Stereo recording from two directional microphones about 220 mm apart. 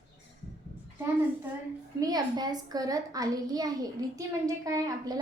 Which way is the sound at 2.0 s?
15° right (ahead or behind).